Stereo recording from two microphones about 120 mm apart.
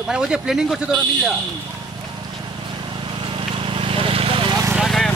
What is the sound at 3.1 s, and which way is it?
Vehicle, 45° right (ahead or behind).